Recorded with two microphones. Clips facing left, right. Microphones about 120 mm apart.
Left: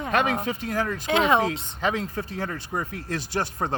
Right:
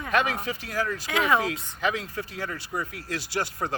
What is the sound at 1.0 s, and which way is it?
Speech, 25° left (ahead or behind).